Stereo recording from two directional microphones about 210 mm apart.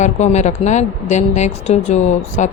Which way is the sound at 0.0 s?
35° left (ahead or behind).